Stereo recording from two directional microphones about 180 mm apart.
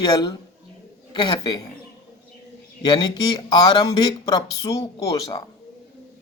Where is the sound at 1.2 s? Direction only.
25° left (ahead or behind).